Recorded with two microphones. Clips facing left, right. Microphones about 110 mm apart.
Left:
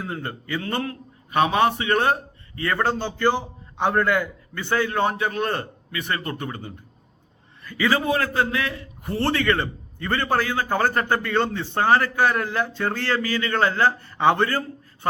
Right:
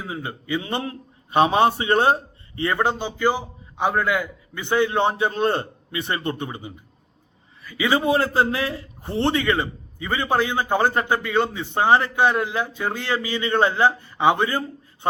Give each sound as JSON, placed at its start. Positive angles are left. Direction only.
{"t": 0.0, "sound": "a man's voice", "side_deg": -5}
{"t": 4.6, "sound": "a man's voice", "side_deg": -20}
{"t": 7.6, "sound": "a man's voice", "side_deg": -5}
{"t": 7.9, "sound": "a man's voice", "side_deg": -25}